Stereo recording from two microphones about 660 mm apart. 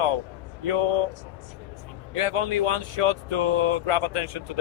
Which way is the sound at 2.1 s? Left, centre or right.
Right.